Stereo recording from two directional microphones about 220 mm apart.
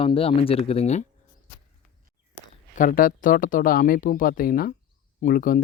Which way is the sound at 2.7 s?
40° left (ahead or behind).